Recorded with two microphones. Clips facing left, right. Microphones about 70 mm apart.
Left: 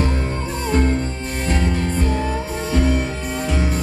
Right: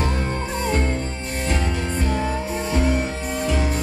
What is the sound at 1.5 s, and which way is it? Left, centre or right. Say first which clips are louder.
Music: left 4 dB; left.